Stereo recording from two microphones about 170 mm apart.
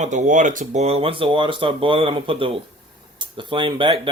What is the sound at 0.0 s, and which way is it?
Speech, 50° right (ahead or behind).